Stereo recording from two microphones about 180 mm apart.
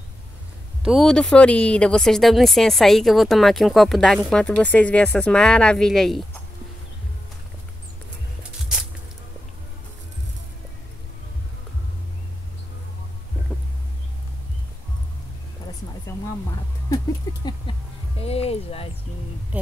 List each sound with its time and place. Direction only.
0.8 s speech: centre (ahead or behind)
8.4 s music: 5° right (ahead or behind)
17.7 s music: 25° left (ahead or behind)